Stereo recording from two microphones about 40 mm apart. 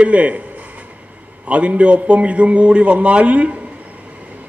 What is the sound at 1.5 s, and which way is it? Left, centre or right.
A man's voice, right.